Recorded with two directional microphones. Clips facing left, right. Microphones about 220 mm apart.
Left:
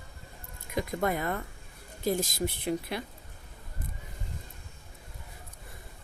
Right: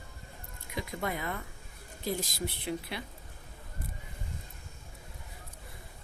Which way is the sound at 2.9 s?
45° left (ahead or behind).